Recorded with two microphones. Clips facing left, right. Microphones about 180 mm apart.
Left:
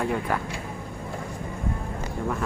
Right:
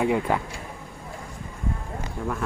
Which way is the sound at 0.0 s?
15° right (ahead or behind).